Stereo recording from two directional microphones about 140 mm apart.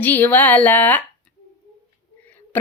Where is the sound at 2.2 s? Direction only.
10° left (ahead or behind).